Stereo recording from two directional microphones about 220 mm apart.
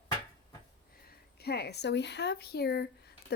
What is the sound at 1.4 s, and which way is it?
Speech, 45° left (ahead or behind).